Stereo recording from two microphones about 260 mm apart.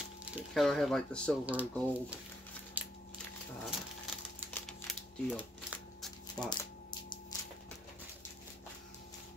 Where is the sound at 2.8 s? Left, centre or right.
Centre.